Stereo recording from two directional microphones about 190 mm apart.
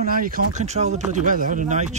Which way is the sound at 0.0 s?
50° right (ahead or behind).